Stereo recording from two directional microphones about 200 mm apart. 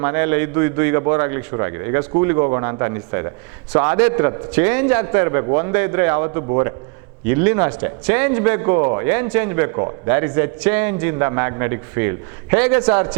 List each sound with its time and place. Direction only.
0.0 s speech: 15° right (ahead or behind)